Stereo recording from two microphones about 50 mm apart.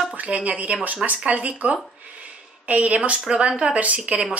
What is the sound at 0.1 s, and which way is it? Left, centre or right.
Speech, right.